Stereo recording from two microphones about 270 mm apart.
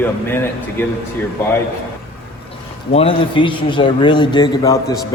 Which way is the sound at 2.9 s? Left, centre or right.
Left.